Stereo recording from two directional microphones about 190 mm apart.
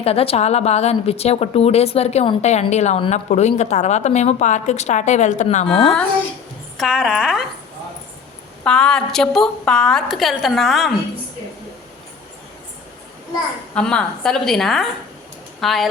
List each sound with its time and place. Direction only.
0.0 s a woman's voice: 30° left (ahead or behind)
5.6 s a woman's voice: centre (ahead or behind)
8.6 s a woman's voice: 5° left (ahead or behind)
13.7 s a woman's voice: 5° left (ahead or behind)